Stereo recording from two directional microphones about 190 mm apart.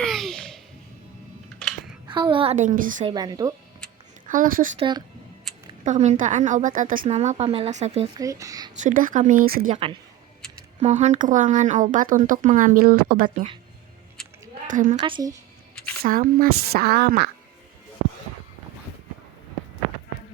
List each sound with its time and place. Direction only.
0.0 s a sound: centre (ahead or behind)
2.0 s a woman's voice: 25° right (ahead or behind); by 2.9 s 45° right (ahead or behind)
3.0 s a woman's voice: 20° right (ahead or behind)
4.3 s speech: 45° right (ahead or behind)
4.8 s a woman's voice: 25° right (ahead or behind)
5.8 s a woman's voice: 40° right (ahead or behind)
8.2 s speech: 15° right (ahead or behind)
8.7 s speech: 45° right (ahead or behind)
10.8 s speech: 35° right (ahead or behind); by 13.2 s 50° right (ahead or behind)
13.2 s a woman's voice: 25° right (ahead or behind)
14.2 s a sound: 5° left (ahead or behind)
14.7 s speech: 45° right (ahead or behind)
15.0 s a woman's voice: 20° right (ahead or behind)
16.0 s speech: 45° right (ahead or behind)